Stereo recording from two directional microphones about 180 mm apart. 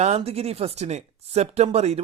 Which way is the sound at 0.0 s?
35° right (ahead or behind).